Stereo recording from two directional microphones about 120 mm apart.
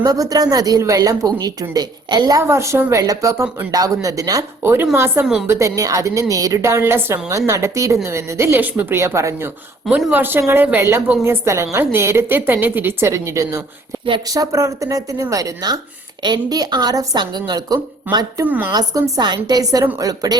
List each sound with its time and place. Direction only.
0.0 s speech: 30° right (ahead or behind)
2.4 s a woman's voice: 20° right (ahead or behind)
5.2 s a woman's voice: 5° right (ahead or behind)
5.5 s a woman's voice: 25° right (ahead or behind)
18.4 s a woman's voice: 15° right (ahead or behind)
18.7 s speech: 30° right (ahead or behind)